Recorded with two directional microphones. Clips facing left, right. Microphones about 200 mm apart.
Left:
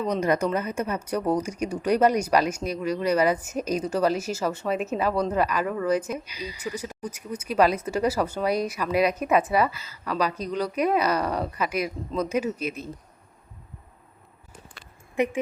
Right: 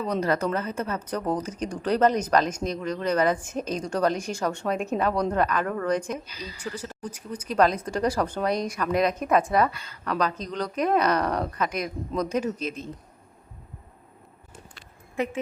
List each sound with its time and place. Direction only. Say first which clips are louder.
0.2 s speech: left 2 dB; 15° left (ahead or behind)
15.1 s speech: left 4 dB; 15° left (ahead or behind)